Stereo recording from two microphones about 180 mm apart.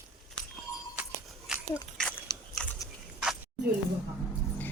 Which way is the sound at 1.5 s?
5° right (ahead or behind).